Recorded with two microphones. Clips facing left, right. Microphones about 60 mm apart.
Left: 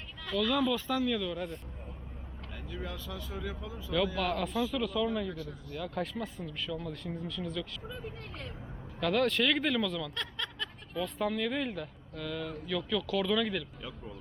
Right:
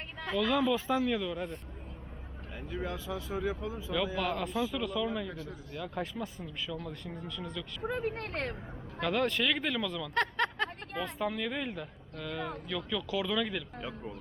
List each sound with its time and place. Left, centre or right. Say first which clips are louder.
0.3 s a man's voice: right 1 dB; centre
2.6 s a sound: right 4 dB; right
2.9 s a man's voice: right 5 dB; centre
3.9 s a man's voice: left 2 dB; centre
7.8 s speech: right 9 dB; right
9.0 s speech: left 2 dB; centre
10.2 s a sound: right 8 dB; right
11.2 s a man's voice: left 3 dB; centre